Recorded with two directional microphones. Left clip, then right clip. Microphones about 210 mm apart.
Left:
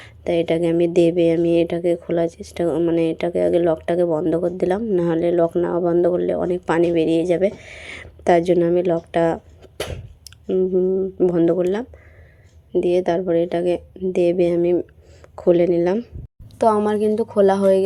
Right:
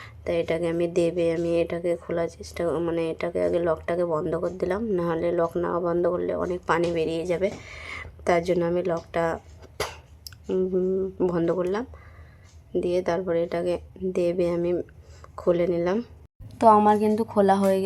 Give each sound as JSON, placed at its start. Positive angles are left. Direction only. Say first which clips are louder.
{"t": 0.0, "sound": "a woman's voice", "louder": "left 6 dB", "side_deg": 20}